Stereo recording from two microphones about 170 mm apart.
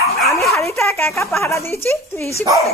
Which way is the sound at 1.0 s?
15° left (ahead or behind).